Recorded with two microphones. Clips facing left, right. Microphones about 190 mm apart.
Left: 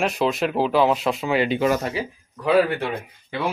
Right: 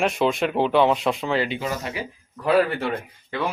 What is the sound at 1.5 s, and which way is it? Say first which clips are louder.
Speech: left 8 dB; 65° left (ahead or behind).